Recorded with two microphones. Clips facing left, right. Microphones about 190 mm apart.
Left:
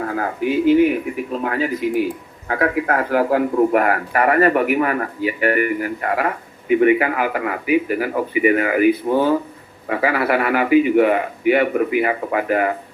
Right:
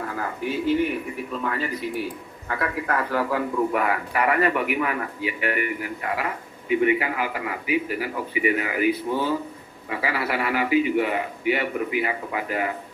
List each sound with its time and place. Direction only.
0.0 s a sound: 55° left (ahead or behind)
0.5 s a man's voice: 90° left
2.5 s a man's voice: 50° left (ahead or behind)